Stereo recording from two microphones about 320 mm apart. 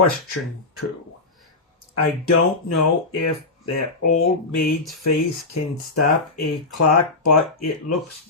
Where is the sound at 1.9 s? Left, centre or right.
Left.